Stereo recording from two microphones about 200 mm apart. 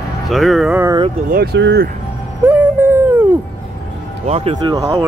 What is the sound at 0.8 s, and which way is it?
Speech, 20° right (ahead or behind).